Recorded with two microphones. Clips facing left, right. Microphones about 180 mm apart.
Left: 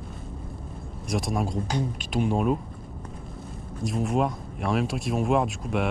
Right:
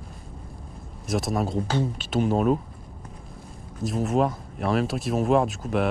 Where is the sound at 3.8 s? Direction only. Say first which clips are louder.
Right 2 dB; centre (ahead or behind).